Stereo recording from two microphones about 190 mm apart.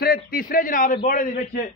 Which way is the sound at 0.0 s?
50° left (ahead or behind).